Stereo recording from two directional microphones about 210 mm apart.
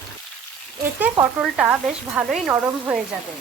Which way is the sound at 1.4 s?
5° right (ahead or behind).